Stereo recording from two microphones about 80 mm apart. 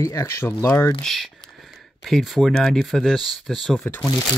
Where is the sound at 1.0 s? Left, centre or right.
Centre.